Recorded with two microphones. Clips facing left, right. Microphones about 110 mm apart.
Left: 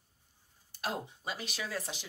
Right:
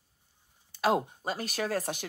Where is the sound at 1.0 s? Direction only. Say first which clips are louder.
Right 6 dB; 45° right (ahead or behind).